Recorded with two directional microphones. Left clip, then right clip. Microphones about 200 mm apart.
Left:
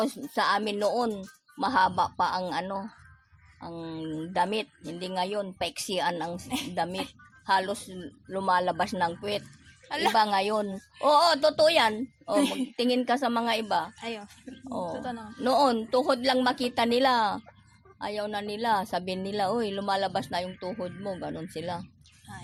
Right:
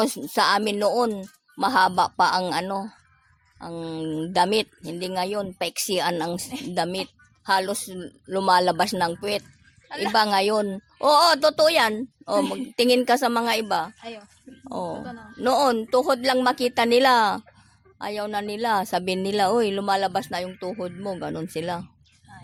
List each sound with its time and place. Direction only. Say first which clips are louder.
0.0 s a woman's voice: right 6 dB; 50° right (ahead or behind)